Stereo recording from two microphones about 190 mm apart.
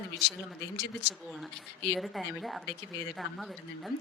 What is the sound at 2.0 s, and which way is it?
Speech, centre (ahead or behind).